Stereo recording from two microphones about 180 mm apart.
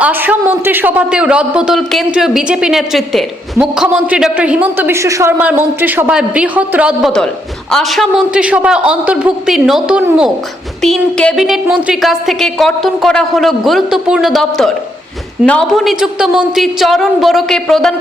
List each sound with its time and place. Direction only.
0.0 s a man's voice: 10° right (ahead or behind)